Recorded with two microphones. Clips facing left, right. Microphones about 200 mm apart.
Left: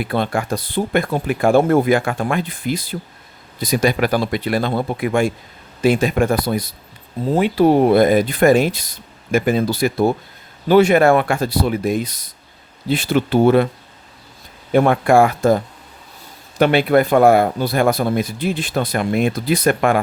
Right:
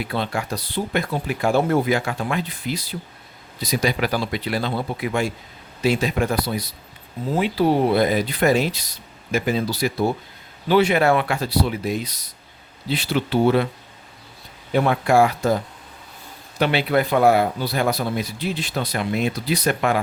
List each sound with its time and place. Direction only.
0.0 s speech: 50° left (ahead or behind)
14.7 s speech: 50° left (ahead or behind)